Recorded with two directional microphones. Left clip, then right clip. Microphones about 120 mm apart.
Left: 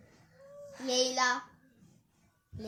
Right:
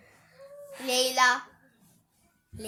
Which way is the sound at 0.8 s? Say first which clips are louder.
Right 6 dB; 20° right (ahead or behind).